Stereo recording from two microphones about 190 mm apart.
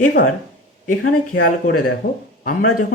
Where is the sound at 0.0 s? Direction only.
50° left (ahead or behind).